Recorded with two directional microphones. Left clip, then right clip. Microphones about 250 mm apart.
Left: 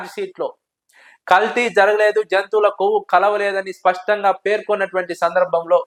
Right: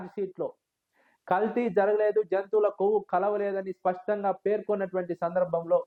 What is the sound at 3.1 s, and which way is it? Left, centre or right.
Speech, centre.